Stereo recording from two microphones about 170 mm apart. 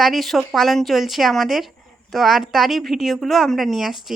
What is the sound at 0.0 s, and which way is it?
Speech, centre (ahead or behind).